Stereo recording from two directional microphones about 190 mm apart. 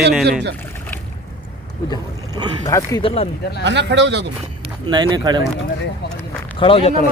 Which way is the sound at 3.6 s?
65° right (ahead or behind).